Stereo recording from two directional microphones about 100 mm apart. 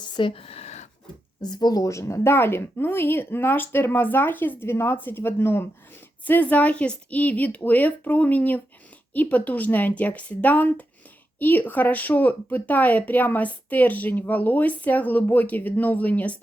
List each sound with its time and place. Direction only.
0.0 s speech: 55° left (ahead or behind); by 0.7 s 85° left
1.4 s a woman's voice: 45° left (ahead or behind); by 16.4 s 15° left (ahead or behind)